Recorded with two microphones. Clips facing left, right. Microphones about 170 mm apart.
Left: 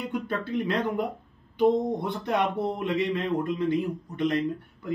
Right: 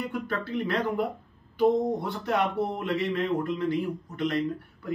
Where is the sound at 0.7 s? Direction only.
20° left (ahead or behind).